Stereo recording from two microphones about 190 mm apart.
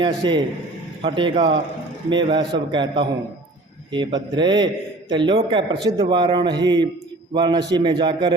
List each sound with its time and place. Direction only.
0.0 s a man's voice: 25° right (ahead or behind)